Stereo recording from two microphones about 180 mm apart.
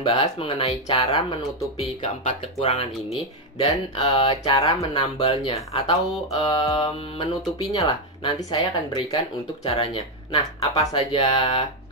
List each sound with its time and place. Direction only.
0.0 s speech: 30° left (ahead or behind)
2.2 s speech: 35° left (ahead or behind)